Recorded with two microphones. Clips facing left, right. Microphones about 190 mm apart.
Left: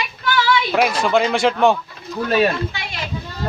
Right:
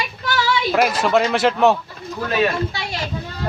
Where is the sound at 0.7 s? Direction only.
Centre (ahead or behind).